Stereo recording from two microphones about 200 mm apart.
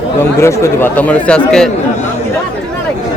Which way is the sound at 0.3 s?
15° left (ahead or behind).